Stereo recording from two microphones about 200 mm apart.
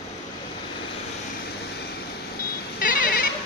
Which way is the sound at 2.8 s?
45° left (ahead or behind).